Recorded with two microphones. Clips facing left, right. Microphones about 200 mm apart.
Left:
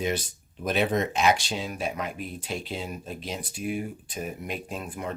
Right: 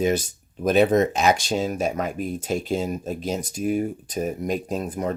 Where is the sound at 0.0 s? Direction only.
45° right (ahead or behind).